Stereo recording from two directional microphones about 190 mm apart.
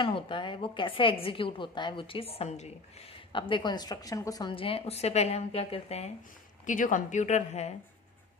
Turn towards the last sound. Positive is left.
turn(degrees=35)  # may be behind; listen again after turning